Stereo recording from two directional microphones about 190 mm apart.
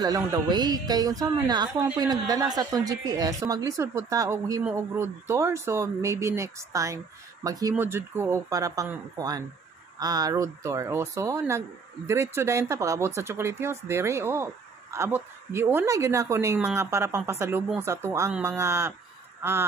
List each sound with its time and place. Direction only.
0.0 s a woman's voice: 20° right (ahead or behind)